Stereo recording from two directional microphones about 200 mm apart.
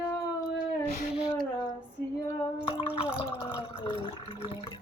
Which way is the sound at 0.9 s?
35° left (ahead or behind).